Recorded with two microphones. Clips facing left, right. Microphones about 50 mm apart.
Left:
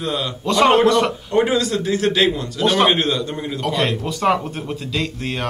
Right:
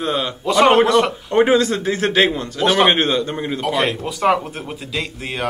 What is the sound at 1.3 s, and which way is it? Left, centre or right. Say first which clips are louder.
A man's voice: right 4 dB; right.